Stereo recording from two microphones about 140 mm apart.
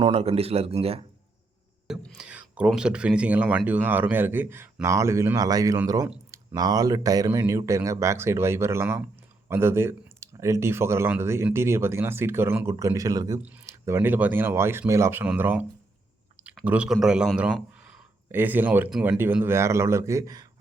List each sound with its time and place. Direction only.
0.0 s speech: 45° right (ahead or behind)
2.1 s a man's voice: 10° right (ahead or behind); by 13.4 s 25° right (ahead or behind)
13.4 s speech: 10° right (ahead or behind)
16.6 s a man's voice: 5° right (ahead or behind); by 20.5 s 25° right (ahead or behind)